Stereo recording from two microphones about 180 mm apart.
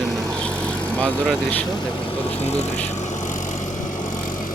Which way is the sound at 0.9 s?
5° left (ahead or behind).